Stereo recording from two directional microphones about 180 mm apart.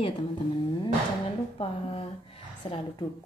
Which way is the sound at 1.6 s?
30° left (ahead or behind).